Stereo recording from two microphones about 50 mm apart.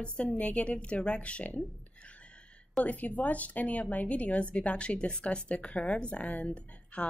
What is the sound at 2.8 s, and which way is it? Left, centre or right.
A woman's voice, left.